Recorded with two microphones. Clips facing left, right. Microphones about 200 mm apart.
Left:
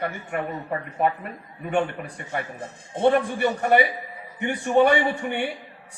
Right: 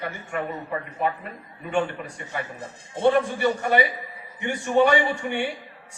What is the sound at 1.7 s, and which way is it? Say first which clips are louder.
A man's voice: left 1 dB; 55° left (ahead or behind).